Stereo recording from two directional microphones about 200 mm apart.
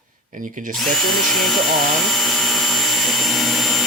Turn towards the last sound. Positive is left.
turn(degrees=0)  # may be behind; listen again after turning